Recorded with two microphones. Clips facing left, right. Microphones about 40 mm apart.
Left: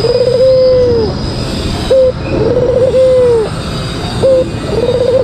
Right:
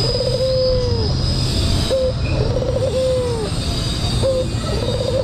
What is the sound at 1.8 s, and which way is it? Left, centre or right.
Bird, left.